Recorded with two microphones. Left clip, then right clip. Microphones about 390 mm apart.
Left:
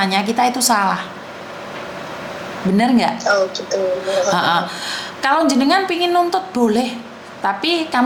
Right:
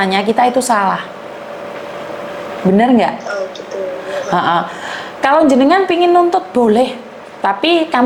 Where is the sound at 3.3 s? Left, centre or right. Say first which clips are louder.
Left 5 dB; left.